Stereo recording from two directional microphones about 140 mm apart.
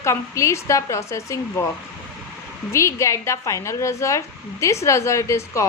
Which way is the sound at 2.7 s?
20° left (ahead or behind).